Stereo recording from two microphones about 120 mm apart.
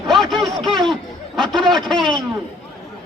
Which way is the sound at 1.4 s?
5° left (ahead or behind).